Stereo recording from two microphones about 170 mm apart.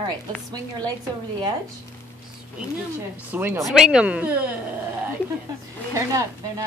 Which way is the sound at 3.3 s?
10° right (ahead or behind).